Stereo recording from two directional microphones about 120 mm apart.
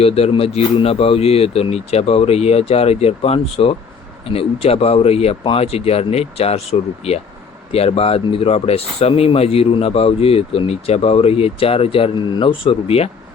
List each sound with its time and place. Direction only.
0.0 s speech: 55° left (ahead or behind)